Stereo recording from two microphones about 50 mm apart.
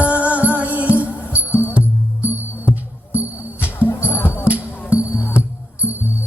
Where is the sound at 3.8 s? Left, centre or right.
Left.